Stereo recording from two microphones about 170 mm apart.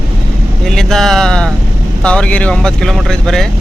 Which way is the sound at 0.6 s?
Centre (ahead or behind).